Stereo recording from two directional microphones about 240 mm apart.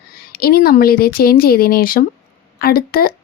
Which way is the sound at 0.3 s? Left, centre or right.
Left.